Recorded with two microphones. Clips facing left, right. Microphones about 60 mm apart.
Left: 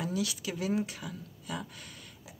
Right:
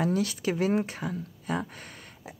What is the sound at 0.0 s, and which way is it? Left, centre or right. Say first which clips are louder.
Speech: right 7 dB; right.